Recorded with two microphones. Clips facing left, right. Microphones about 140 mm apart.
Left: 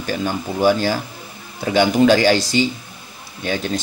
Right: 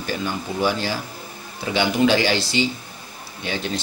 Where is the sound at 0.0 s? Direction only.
45° left (ahead or behind).